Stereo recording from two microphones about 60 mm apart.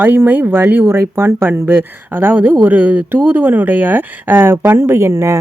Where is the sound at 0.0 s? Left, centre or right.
Right.